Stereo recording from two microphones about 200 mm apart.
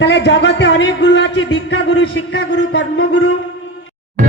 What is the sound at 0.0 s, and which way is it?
Speech, 60° left (ahead or behind).